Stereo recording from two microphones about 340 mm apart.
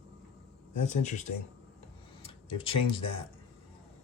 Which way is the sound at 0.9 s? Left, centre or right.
Left.